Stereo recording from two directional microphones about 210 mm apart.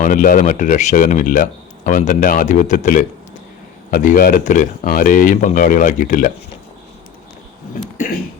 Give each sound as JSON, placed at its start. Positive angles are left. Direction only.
{"t": 0.0, "sound": "speech", "side_deg": 40}